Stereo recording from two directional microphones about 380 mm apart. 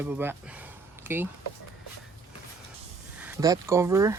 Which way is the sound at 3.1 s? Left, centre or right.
Centre.